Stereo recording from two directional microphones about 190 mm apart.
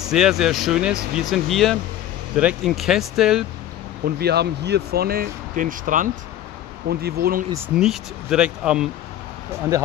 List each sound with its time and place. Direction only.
0.0 s speech: centre (ahead or behind)
4.0 s speech: 60° right (ahead or behind)
6.9 s speech: 55° right (ahead or behind)
7.6 s speech: 5° right (ahead or behind)